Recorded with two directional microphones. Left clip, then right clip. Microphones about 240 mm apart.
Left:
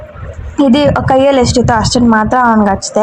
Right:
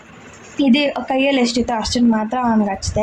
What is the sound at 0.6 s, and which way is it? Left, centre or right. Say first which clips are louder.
A woman's voice: left 7 dB; left.